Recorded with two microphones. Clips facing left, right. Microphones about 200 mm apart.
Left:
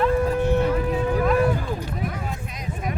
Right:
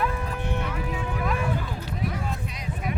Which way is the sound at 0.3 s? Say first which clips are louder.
Left 10 dB; 40° left (ahead or behind).